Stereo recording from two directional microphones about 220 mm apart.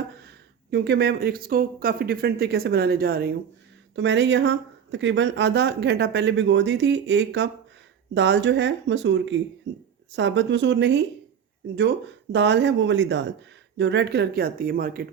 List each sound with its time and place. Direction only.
0.3 s speech: 50° right (ahead or behind)